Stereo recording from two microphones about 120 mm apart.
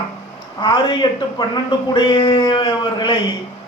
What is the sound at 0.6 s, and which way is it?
A man's voice, 40° left (ahead or behind).